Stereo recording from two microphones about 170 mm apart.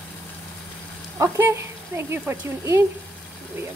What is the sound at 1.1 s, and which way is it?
Speech, 15° right (ahead or behind).